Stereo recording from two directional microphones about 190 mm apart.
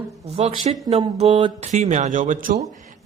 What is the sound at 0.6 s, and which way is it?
A woman's voice, 35° right (ahead or behind).